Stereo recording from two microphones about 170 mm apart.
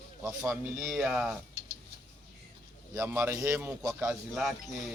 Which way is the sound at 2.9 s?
15° right (ahead or behind).